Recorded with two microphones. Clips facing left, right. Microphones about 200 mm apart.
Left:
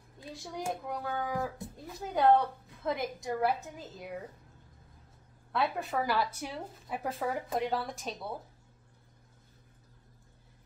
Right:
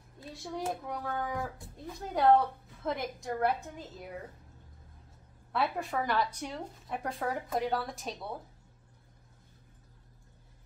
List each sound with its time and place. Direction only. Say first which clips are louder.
0.3 s speech: right 1 dB; centre (ahead or behind)
5.5 s speech: even; centre (ahead or behind)